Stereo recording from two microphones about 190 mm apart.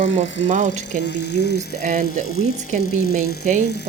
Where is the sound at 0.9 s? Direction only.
65° left (ahead or behind).